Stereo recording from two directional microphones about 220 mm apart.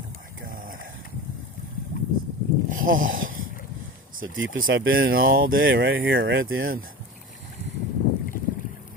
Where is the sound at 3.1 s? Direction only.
40° right (ahead or behind).